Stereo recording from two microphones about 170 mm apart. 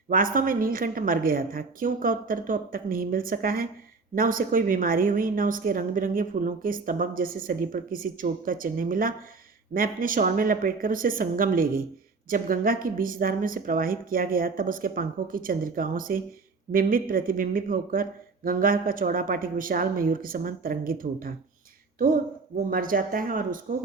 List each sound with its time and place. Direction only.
0.1 s a woman's voice: 55° right (ahead or behind)